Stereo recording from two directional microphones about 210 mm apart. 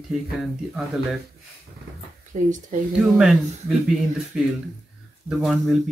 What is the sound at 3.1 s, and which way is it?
Speech, centre (ahead or behind).